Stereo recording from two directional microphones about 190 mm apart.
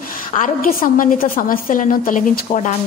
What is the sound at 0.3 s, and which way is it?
A woman's voice, 45° left (ahead or behind).